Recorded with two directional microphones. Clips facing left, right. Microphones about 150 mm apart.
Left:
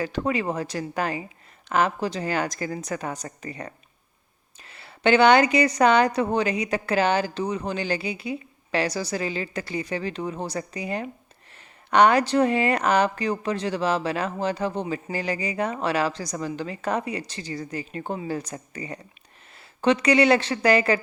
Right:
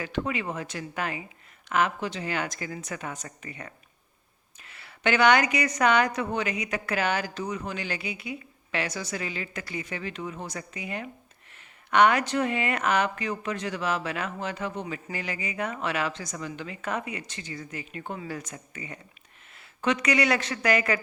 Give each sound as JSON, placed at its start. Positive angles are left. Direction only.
{"t": 0.0, "sound": "speech", "side_deg": 35}